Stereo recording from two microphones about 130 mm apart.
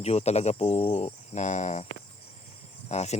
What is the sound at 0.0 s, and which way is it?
Speech, 55° left (ahead or behind).